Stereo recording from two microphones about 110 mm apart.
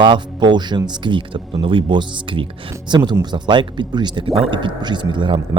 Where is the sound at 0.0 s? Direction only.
45° right (ahead or behind).